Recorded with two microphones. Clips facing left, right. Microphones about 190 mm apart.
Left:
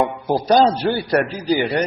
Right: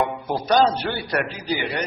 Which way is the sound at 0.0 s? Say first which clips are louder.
Left 4 dB; 35° left (ahead or behind).